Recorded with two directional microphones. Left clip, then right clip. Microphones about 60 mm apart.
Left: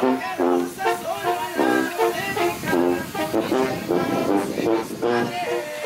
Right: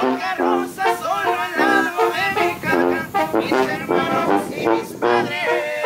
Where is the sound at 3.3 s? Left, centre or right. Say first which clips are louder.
Left 1 dB; right.